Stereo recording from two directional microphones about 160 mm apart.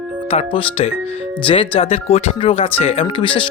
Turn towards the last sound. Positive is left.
turn(degrees=30)  # may be behind; listen again after turning